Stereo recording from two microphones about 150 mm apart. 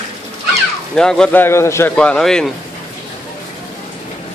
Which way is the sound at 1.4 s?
20° left (ahead or behind).